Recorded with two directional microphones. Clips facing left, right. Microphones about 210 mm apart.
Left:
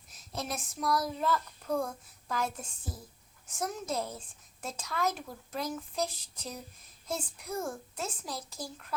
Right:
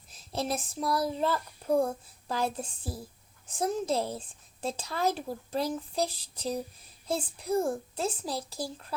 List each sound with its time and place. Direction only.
0.1 s speech: 30° right (ahead or behind)